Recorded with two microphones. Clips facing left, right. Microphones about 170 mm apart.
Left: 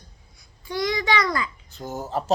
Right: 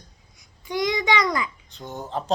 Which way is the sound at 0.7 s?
20° right (ahead or behind).